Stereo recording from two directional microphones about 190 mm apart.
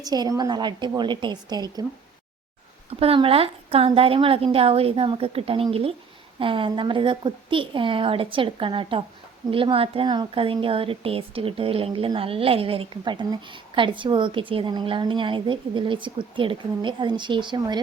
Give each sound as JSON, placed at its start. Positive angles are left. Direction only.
{"t": 0.0, "sound": "a woman's voice", "side_deg": -20}
{"t": 3.0, "sound": "a woman's voice", "side_deg": -30}